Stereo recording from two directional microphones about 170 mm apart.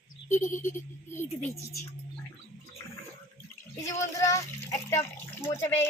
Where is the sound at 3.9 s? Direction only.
20° left (ahead or behind).